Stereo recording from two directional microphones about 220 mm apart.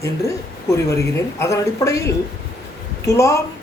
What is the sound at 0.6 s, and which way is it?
Speech, 15° left (ahead or behind).